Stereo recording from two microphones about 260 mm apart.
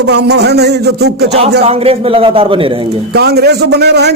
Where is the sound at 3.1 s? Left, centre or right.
Right.